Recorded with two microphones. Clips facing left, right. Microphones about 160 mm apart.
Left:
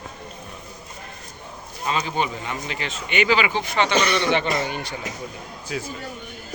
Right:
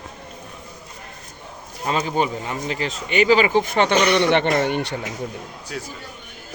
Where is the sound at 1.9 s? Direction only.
40° right (ahead or behind).